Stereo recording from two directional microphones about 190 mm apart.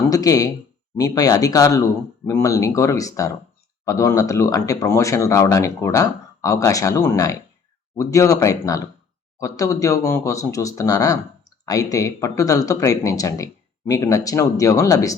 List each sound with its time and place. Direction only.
0.1 s speech: 20° left (ahead or behind)